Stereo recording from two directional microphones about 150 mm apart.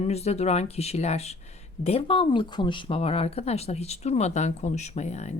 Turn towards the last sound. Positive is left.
turn(degrees=50)  # may be behind; listen again after turning